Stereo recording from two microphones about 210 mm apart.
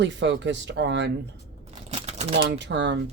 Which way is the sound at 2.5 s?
55° right (ahead or behind).